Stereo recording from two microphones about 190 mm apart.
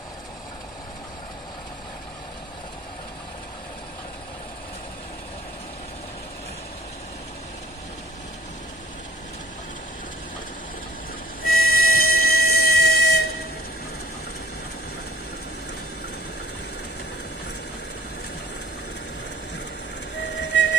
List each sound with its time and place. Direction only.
11.4 s music: 50° left (ahead or behind)
20.3 s music: 70° left (ahead or behind)